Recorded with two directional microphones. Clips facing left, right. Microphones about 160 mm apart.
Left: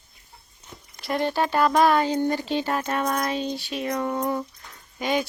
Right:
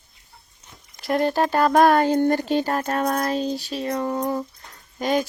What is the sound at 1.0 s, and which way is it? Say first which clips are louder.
Speech: right 4 dB; centre (ahead or behind).